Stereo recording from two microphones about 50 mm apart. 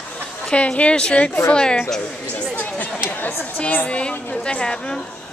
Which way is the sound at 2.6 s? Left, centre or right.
Left.